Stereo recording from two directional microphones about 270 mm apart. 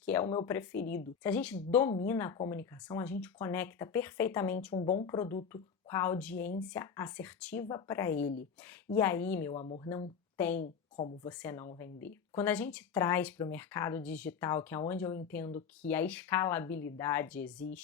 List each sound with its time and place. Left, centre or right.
0.0 s speech: centre
9.6 s speech: left
9.9 s speech: centre